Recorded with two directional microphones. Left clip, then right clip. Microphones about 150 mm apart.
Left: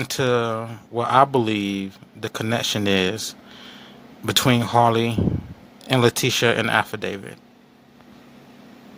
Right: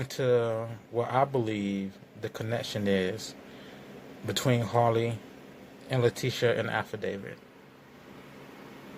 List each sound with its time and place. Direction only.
0.0 s speech: 20° left (ahead or behind)
4.3 s speech: 20° left (ahead or behind)